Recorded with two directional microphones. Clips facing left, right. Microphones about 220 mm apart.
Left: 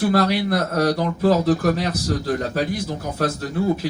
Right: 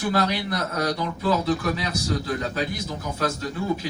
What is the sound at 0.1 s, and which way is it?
A man's voice, 50° left (ahead or behind).